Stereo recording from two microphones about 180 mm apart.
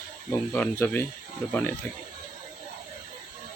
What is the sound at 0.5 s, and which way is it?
Speech, 10° left (ahead or behind).